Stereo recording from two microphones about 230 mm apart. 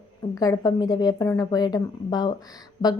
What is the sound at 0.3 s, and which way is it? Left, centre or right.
A woman's voice, centre.